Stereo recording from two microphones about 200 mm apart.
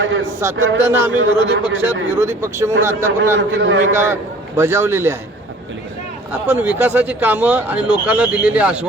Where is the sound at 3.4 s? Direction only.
65° right (ahead or behind).